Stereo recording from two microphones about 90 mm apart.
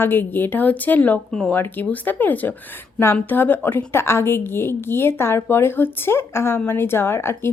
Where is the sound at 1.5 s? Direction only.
20° left (ahead or behind).